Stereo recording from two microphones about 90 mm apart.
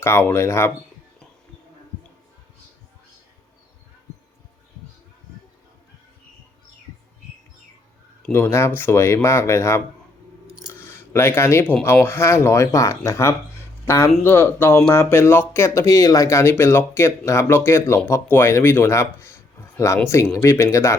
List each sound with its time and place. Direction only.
0.0 s speech: 25° left (ahead or behind)
8.3 s speech: 30° left (ahead or behind)